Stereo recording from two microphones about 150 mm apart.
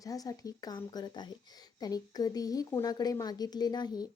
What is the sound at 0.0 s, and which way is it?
A woman's voice, 25° left (ahead or behind).